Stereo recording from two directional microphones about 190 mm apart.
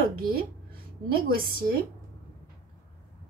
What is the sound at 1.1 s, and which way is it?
Speech, 50° right (ahead or behind).